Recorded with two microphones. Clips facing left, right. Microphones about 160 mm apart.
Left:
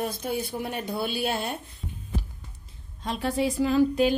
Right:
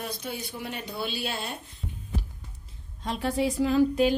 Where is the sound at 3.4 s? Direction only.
80° left.